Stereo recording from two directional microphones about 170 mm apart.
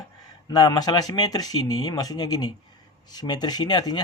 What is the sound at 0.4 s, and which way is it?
Speech, 25° left (ahead or behind).